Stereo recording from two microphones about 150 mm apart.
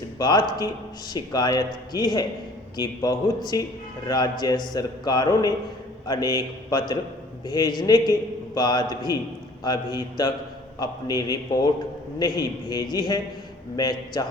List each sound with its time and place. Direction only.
0.2 s a man's voice: 30° left (ahead or behind)